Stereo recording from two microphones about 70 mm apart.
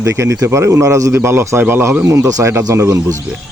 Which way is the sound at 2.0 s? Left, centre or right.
Right.